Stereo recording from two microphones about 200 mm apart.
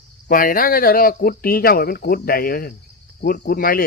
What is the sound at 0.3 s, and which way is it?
Speech, 45° left (ahead or behind).